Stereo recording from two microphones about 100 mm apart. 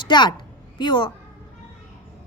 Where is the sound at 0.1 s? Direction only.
50° left (ahead or behind).